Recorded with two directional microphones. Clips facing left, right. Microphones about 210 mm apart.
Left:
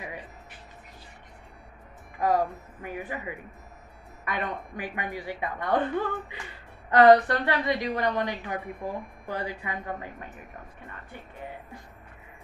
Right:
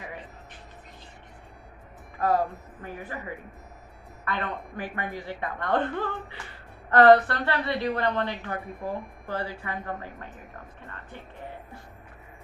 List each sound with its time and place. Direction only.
2.1 s a woman's voice: 15° left (ahead or behind)